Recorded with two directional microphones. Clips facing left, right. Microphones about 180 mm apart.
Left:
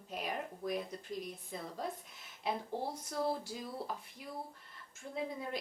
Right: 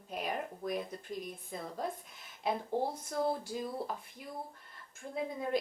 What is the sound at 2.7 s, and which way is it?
Speech, 50° right (ahead or behind).